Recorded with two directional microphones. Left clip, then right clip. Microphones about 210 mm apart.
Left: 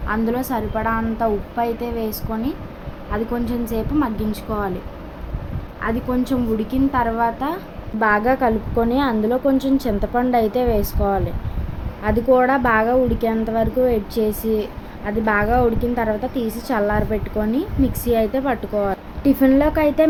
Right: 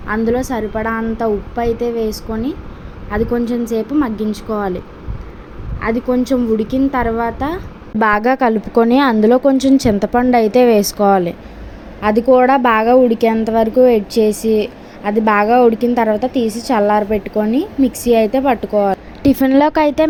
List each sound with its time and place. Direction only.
0.1 s a woman's voice: 15° right (ahead or behind)
5.8 s a woman's voice: 20° right (ahead or behind)
7.9 s a woman's voice: 40° right (ahead or behind); by 18.9 s 25° right (ahead or behind)
19.2 s a woman's voice: 35° right (ahead or behind)